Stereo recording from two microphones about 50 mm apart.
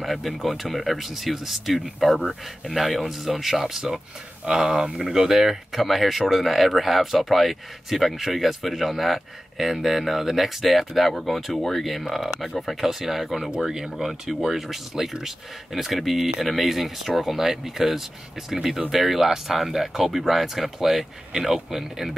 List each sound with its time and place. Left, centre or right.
0.0 s speech: centre